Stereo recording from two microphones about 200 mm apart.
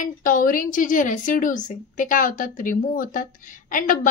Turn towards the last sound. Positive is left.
turn(degrees=45)  # may be behind; listen again after turning